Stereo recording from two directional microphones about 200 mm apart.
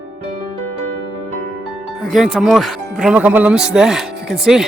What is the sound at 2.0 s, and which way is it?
Speech, centre (ahead or behind).